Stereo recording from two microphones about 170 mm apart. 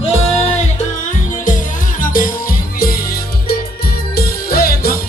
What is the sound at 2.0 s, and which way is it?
Music, 55° left (ahead or behind).